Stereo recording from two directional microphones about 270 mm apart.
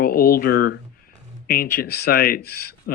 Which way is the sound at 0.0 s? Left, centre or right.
Left.